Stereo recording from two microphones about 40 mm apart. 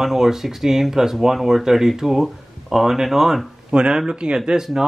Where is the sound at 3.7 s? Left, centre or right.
Right.